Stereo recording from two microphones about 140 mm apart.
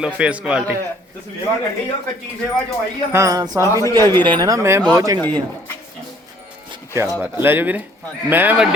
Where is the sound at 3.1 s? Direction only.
25° right (ahead or behind).